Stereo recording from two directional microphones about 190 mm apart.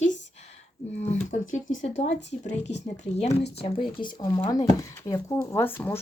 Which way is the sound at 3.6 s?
30° left (ahead or behind).